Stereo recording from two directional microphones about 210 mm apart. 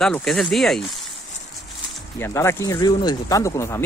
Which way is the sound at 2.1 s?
10° left (ahead or behind).